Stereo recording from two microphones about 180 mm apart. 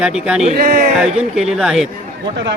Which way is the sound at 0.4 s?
50° right (ahead or behind).